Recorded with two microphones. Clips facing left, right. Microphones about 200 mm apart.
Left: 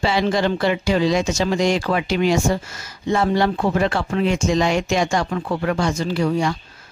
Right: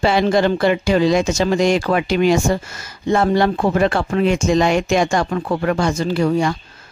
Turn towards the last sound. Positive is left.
turn(degrees=-50)  # may be behind; listen again after turning